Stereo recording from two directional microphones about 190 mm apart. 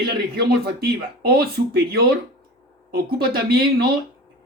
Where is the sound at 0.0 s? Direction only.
55° right (ahead or behind).